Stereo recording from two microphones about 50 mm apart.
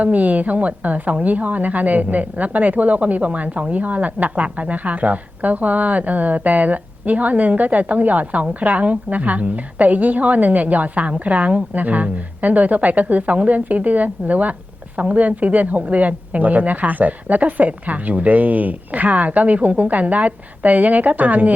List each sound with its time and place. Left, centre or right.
0.0 s a woman's voice: right